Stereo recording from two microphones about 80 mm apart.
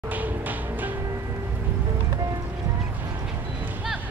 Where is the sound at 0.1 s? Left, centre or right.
Right.